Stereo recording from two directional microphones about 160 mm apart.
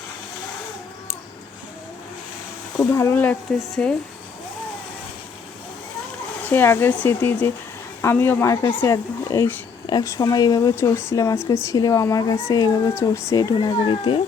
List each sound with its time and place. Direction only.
2.7 s speech: 20° left (ahead or behind)
6.4 s speech: 10° left (ahead or behind); by 14.2 s 30° left (ahead or behind)